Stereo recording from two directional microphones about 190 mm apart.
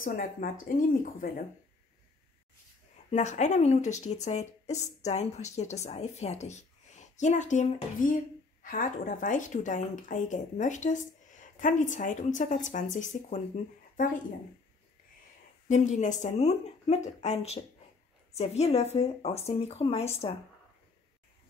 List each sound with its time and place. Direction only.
0.0 s speech: 45° left (ahead or behind)
3.1 s speech: 40° left (ahead or behind)
15.7 s speech: 40° left (ahead or behind)